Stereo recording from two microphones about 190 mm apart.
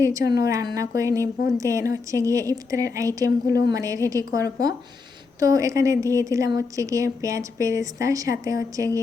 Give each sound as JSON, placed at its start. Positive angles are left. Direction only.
{"t": 0.0, "sound": "a woman's voice", "side_deg": -15}